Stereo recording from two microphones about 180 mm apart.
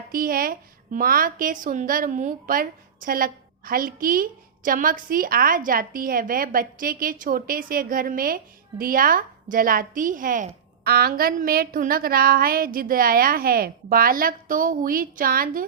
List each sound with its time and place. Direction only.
0.1 s a woman's voice: 55° right (ahead or behind)